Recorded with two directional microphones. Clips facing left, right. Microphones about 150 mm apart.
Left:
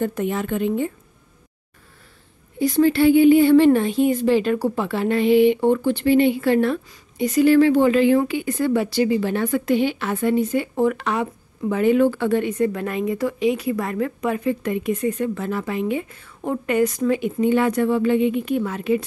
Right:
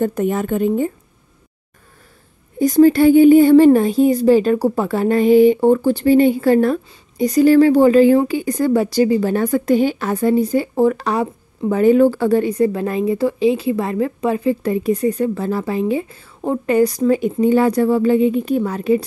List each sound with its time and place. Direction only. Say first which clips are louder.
0.0 s a woman's voice: right 5 dB; 45° right (ahead or behind)
2.6 s a woman's voice: right 5 dB; 40° right (ahead or behind)